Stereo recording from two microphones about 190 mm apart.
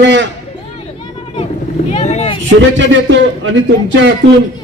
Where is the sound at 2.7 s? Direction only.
75° right (ahead or behind).